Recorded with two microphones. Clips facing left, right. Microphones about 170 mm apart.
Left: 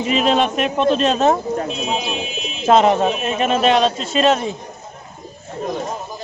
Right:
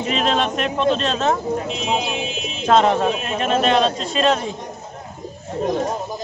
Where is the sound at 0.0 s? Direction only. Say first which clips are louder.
Left 3 dB; 10° left (ahead or behind).